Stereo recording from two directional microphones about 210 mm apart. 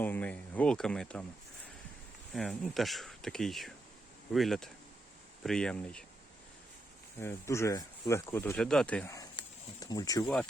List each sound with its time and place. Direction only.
0.0 s speech: 10° left (ahead or behind)
2.3 s speech: centre (ahead or behind)
7.2 s speech: 10° left (ahead or behind)
9.4 s a sound: 20° left (ahead or behind)
9.8 s speech: 15° left (ahead or behind)